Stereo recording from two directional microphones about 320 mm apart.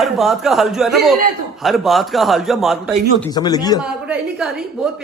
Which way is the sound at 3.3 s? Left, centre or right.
Centre.